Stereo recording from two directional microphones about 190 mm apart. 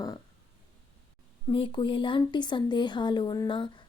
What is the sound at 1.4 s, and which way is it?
Speech, 25° left (ahead or behind).